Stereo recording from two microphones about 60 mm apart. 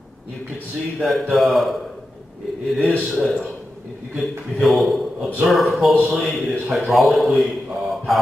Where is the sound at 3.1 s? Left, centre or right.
Centre.